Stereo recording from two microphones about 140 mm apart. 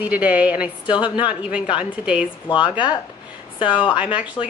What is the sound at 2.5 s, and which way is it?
A woman's voice, 35° left (ahead or behind).